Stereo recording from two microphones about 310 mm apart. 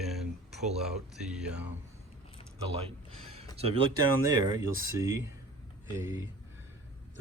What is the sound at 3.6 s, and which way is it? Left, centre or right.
Speech, centre.